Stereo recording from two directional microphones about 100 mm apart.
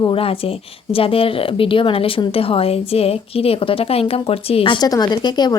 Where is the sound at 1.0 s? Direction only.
70° left (ahead or behind).